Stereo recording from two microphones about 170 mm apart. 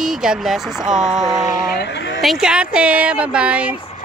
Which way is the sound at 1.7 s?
85° left.